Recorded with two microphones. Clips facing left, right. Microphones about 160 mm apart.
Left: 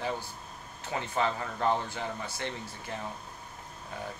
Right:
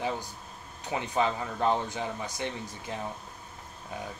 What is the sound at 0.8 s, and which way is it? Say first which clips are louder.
Speech: right 2 dB; 15° right (ahead or behind).